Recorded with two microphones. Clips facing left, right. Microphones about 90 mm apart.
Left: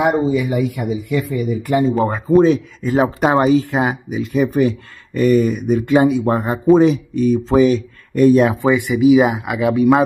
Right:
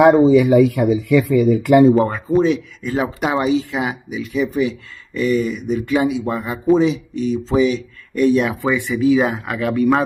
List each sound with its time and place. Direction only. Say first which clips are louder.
0.0 s speech: right 6 dB; 85° right
2.3 s speech: left 4 dB; 40° left (ahead or behind)
5.8 s speech: left 4 dB; 35° left (ahead or behind)
8.5 s speech: left 3 dB; 20° left (ahead or behind)